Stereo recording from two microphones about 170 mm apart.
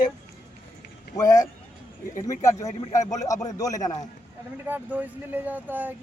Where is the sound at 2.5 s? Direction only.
20° left (ahead or behind).